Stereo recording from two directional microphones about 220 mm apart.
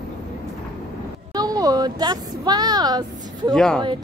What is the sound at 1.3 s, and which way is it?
A woman's voice, 15° right (ahead or behind).